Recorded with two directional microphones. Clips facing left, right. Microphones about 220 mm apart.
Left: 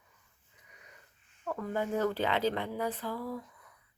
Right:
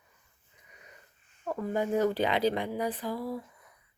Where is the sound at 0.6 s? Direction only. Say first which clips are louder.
Right 3 dB; 25° right (ahead or behind).